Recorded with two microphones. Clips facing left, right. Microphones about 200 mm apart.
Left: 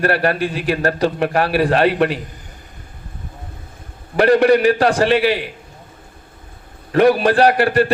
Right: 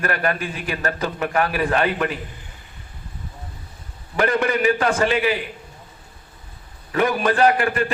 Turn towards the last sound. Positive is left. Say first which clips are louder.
# left 5 dB
turn(degrees=35)  # may be behind; listen again after turning